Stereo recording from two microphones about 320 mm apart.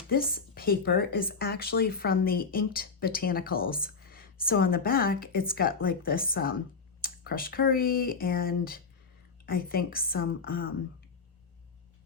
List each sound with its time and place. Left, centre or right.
0.1 s speech: left